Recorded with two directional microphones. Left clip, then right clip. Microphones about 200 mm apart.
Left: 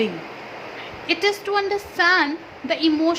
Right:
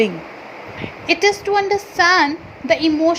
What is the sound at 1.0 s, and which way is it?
A woman's voice, 20° right (ahead or behind).